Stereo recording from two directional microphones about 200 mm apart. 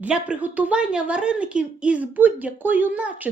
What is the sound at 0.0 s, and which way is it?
A woman's voice, 5° right (ahead or behind).